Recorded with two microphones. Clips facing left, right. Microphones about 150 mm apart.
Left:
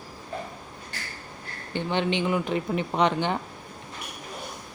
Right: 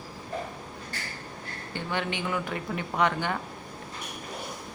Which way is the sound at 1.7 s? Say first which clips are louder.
Left 6 dB; 20° left (ahead or behind).